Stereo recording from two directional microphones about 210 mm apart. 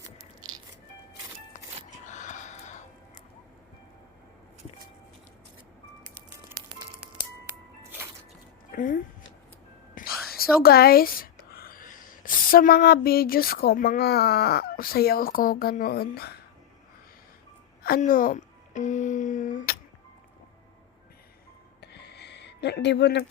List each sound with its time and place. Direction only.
2.0 s wheeze: 35° left (ahead or behind)
8.7 s music: 40° left (ahead or behind)
10.0 s whispering: 40° left (ahead or behind)
10.3 s speech: 45° left (ahead or behind)
17.8 s speech: 40° left (ahead or behind)
21.8 s a sound: 50° left (ahead or behind)